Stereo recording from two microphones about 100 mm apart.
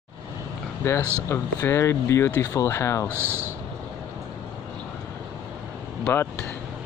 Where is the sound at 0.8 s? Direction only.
25° left (ahead or behind).